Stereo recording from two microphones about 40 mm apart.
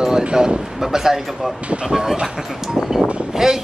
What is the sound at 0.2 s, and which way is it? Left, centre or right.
Speech, right.